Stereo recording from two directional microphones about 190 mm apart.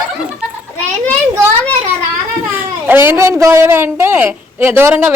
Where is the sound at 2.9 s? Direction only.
15° right (ahead or behind).